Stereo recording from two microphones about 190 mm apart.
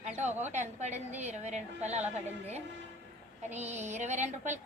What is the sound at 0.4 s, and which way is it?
A woman's voice, 35° right (ahead or behind).